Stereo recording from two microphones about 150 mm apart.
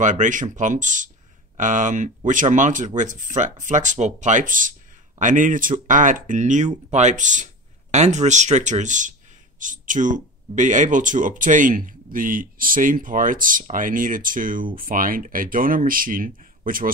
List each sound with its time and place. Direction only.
0.0 s speech: 55° right (ahead or behind)